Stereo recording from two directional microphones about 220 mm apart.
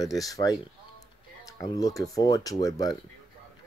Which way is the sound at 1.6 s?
15° left (ahead or behind).